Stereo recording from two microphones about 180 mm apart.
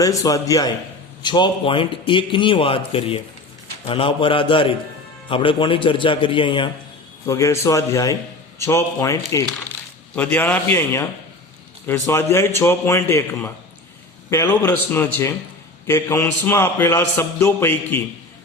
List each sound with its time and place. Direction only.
0.0 s a man's voice: 20° left (ahead or behind)